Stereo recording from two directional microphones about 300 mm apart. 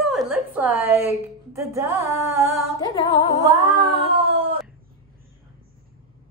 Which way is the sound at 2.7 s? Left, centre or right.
Centre.